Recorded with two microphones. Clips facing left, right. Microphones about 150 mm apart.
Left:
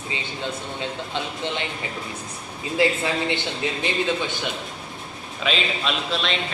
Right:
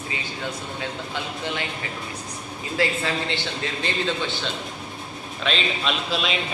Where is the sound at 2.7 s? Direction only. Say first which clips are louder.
Left 3 dB; 20° left (ahead or behind).